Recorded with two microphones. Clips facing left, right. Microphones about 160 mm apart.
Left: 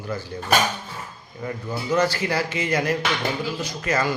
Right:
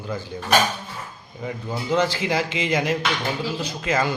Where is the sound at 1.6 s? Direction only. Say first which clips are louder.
Even; 25° right (ahead or behind).